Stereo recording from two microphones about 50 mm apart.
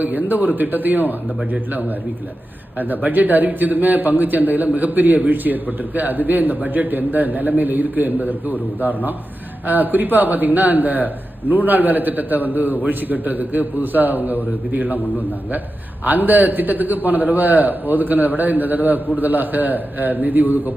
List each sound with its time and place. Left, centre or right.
0.0 s speech: right
2.7 s speech: right
16.0 s speech: right